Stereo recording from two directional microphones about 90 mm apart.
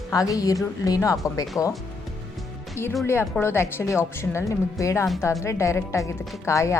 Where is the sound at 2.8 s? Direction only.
30° left (ahead or behind).